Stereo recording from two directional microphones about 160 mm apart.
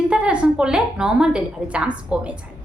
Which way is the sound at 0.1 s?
5° right (ahead or behind).